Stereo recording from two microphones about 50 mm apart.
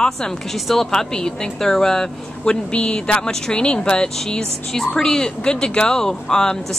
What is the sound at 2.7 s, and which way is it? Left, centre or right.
A woman's voice, left.